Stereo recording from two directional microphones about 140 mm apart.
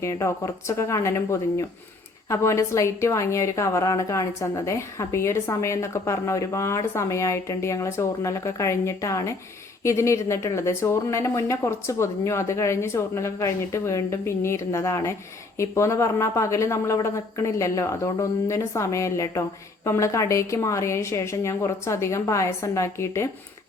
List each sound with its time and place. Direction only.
0.0 s speech: 20° left (ahead or behind)